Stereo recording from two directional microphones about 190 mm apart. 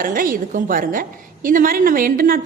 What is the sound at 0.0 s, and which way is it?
A woman's voice, 45° right (ahead or behind).